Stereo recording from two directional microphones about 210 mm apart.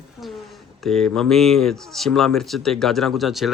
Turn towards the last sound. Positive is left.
turn(degrees=0)  # may be behind; listen again after turning